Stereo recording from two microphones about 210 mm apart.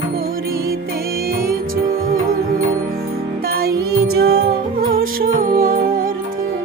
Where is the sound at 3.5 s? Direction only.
45° right (ahead or behind).